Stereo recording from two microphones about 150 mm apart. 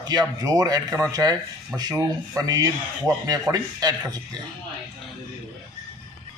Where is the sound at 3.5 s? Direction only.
25° right (ahead or behind).